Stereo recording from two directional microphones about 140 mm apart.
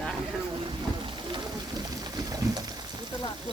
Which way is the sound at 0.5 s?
35° right (ahead or behind).